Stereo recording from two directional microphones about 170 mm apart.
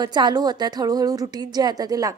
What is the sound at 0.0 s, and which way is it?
A woman's voice, 25° right (ahead or behind).